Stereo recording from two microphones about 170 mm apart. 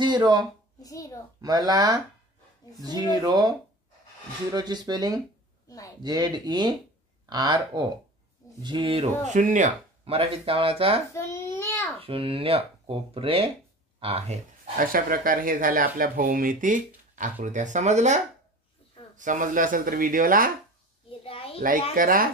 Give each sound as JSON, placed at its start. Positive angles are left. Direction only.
{"t": 0.0, "sound": "speech", "side_deg": -25}
{"t": 0.8, "sound": "a child's voice", "side_deg": 20}
{"t": 1.4, "sound": "speech", "side_deg": -25}
{"t": 5.7, "sound": "a child's voice", "side_deg": 20}
{"t": 6.0, "sound": "speech", "side_deg": -25}
{"t": 9.3, "sound": "speech", "side_deg": -45}
{"t": 10.0, "sound": "speech", "side_deg": -35}
{"t": 11.1, "sound": "a child's voice", "side_deg": 15}
{"t": 12.0, "sound": "speech", "side_deg": -35}
{"t": 14.9, "sound": "speech", "side_deg": -55}
{"t": 21.2, "sound": "a sound", "side_deg": 35}
{"t": 21.5, "sound": "a child's voice", "side_deg": -55}